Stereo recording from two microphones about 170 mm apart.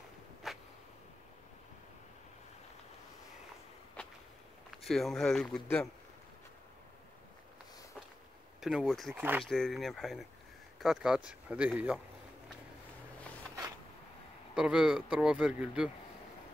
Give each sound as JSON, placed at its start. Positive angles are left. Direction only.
{"t": 0.4, "sound": "a sound", "side_deg": 0}
{"t": 4.6, "sound": "speech", "side_deg": 0}
{"t": 8.5, "sound": "speech", "side_deg": 0}
{"t": 9.1, "sound": "speech", "side_deg": -10}
{"t": 9.4, "sound": "speech", "side_deg": 0}
{"t": 14.5, "sound": "speech", "side_deg": -5}